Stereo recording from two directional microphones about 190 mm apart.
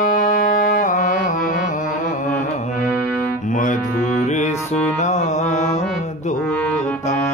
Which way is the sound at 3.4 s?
45° left (ahead or behind).